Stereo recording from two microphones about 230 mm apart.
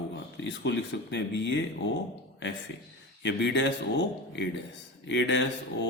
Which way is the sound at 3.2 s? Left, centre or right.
Left.